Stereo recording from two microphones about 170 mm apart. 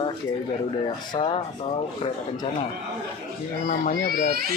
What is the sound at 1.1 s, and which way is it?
Speech, 30° left (ahead or behind).